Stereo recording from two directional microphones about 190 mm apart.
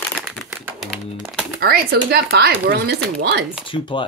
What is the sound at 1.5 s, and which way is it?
Speech, 55° right (ahead or behind).